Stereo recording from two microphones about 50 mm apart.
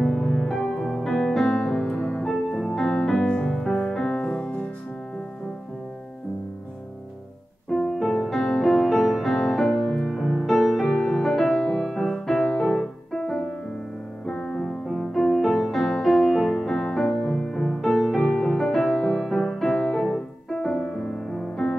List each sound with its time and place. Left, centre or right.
0.0 s music: centre
3.2 s music: centre
7.7 s music: centre
14.2 s music: centre
14.6 s music: centre
16.2 s music: centre
16.6 s music: centre
18.2 s music: centre
18.5 s music: centre